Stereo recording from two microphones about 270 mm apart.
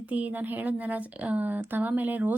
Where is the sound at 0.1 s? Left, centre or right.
Centre.